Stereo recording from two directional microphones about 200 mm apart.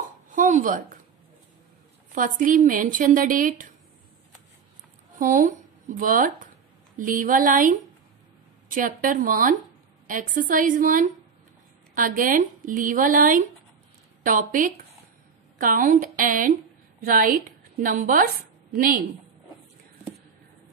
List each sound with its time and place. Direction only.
0.3 s a sound: 40° right (ahead or behind)
2.1 s speech: 40° right (ahead or behind)
5.2 s a woman's voice: 40° right (ahead or behind)